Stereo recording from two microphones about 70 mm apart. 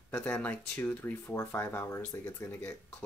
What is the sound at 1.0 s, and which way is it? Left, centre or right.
Speech, left.